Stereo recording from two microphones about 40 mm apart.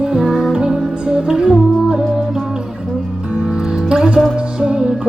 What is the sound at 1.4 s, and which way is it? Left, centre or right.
Music, centre.